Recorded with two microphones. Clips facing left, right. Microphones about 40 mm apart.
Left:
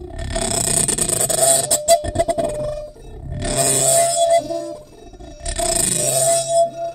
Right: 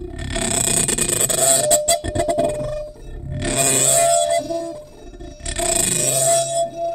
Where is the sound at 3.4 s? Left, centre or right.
Right.